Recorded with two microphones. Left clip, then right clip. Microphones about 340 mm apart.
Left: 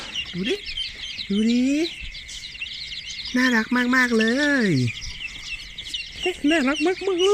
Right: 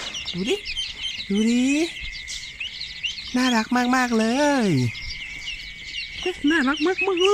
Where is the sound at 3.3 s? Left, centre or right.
Centre.